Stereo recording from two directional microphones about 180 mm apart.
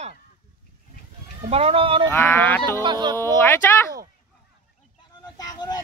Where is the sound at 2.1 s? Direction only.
10° left (ahead or behind).